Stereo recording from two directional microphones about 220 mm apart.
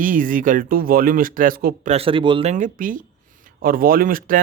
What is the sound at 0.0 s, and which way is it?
Speech, 40° right (ahead or behind).